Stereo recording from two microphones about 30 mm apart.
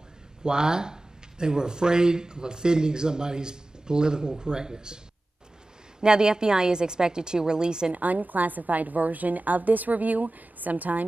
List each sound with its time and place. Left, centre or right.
0.4 s a man's voice: right
7.9 s a woman's voice: right